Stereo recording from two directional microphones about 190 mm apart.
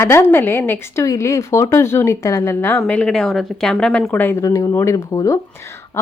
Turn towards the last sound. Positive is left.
turn(degrees=15)  # may be behind; listen again after turning